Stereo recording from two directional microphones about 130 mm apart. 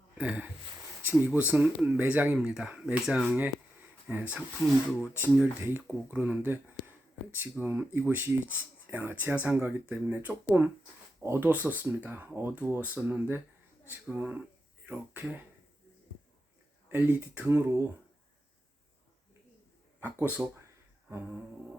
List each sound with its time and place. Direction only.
0.2 s speech: 10° right (ahead or behind)
16.9 s speech: 15° right (ahead or behind)
20.0 s speech: 10° right (ahead or behind)